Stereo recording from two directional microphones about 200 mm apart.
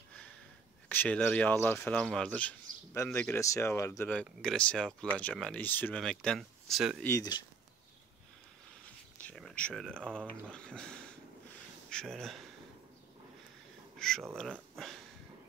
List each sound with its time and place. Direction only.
0.8 s speech: 5° left (ahead or behind)
7.0 s speech: 15° left (ahead or behind)
8.8 s speech: 5° left (ahead or behind)
13.9 s speech: 5° left (ahead or behind)